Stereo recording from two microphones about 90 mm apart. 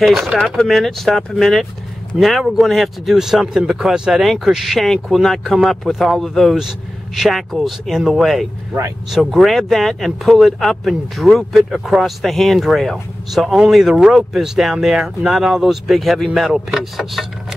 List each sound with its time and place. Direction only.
0.0 s speech: centre (ahead or behind)